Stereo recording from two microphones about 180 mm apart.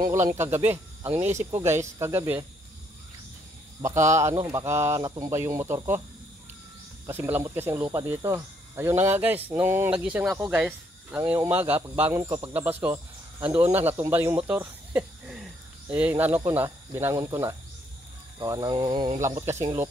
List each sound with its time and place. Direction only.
0.4 s speech: 10° right (ahead or behind)
4.1 s speech: 15° right (ahead or behind)
7.1 s speech: 10° right (ahead or behind)
14.5 s cricket: 10° right (ahead or behind)
16.5 s speech: 15° right (ahead or behind)